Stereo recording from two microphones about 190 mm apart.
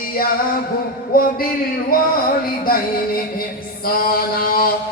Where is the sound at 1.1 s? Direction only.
50° left (ahead or behind).